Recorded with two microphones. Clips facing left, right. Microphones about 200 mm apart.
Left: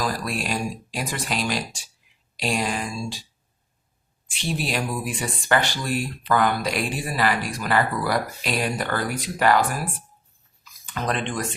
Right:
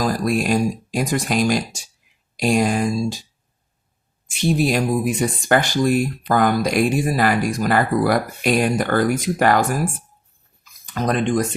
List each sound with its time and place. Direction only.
0.0 s speech: 45° right (ahead or behind)
4.3 s speech: 45° right (ahead or behind)